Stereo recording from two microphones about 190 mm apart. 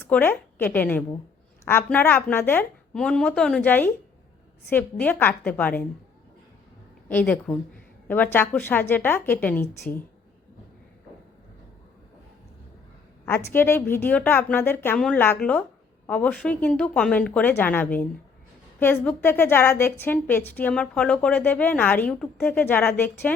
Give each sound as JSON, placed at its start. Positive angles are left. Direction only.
{"t": 0.1, "sound": "a woman's voice", "side_deg": 10}
{"t": 7.1, "sound": "a woman's voice", "side_deg": 10}
{"t": 13.2, "sound": "a woman's voice", "side_deg": 10}